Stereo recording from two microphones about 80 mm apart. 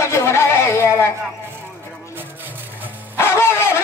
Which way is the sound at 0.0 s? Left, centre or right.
Left.